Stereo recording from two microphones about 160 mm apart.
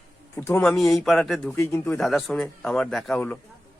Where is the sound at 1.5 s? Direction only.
15° left (ahead or behind).